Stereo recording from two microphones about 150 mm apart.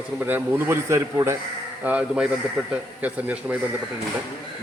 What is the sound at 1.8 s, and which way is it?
A man's voice, 5° right (ahead or behind).